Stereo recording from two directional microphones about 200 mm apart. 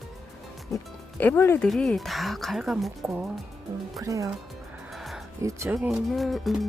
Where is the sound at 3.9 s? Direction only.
15° right (ahead or behind).